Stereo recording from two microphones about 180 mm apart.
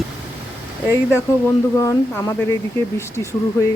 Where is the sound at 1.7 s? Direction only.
15° left (ahead or behind).